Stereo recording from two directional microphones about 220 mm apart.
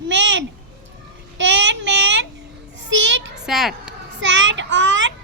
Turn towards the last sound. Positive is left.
turn(degrees=-55)  # may be behind; listen again after turning